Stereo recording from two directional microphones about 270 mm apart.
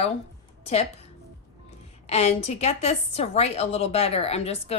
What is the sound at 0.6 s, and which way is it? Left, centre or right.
Speech, left.